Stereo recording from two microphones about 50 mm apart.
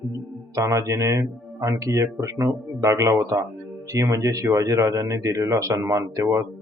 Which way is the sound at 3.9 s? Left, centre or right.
Right.